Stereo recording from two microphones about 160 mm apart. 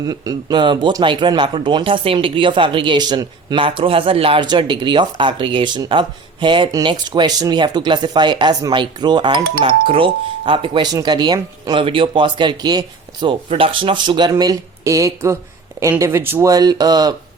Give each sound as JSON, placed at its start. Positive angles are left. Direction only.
{"t": 0.0, "sound": "speech", "side_deg": -25}